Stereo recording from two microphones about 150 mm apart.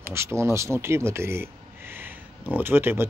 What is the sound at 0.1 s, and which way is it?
Speech, 15° right (ahead or behind).